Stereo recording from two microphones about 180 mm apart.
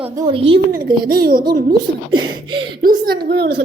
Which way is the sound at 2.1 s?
25° right (ahead or behind).